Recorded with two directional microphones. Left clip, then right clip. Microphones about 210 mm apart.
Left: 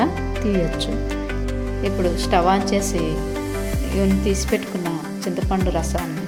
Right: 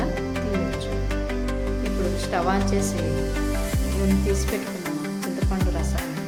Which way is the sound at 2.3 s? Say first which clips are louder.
Left 6 dB; 25° left (ahead or behind).